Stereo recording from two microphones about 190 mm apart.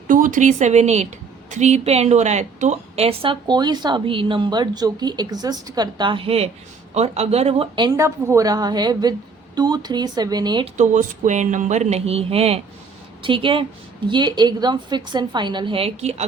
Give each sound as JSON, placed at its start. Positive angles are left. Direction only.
{"t": 0.1, "sound": "a woman's voice", "side_deg": -45}
{"t": 10.8, "sound": "a woman's voice", "side_deg": -40}